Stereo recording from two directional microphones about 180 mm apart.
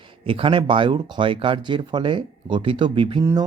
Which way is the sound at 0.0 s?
30° right (ahead or behind).